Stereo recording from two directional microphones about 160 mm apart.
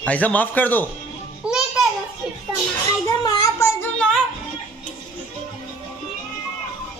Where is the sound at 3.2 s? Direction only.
25° left (ahead or behind).